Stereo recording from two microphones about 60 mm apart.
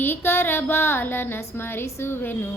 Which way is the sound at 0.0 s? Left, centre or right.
Left.